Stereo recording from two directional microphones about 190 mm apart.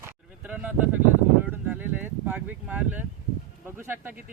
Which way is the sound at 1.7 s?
10° right (ahead or behind).